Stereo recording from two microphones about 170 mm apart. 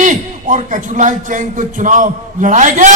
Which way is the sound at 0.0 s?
50° right (ahead or behind).